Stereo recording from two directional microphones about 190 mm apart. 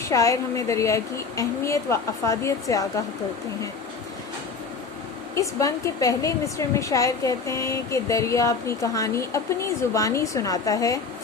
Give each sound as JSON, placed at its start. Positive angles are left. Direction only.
{"t": 0.1, "sound": "a woman's voice", "side_deg": 15}
{"t": 5.3, "sound": "a woman's voice", "side_deg": 15}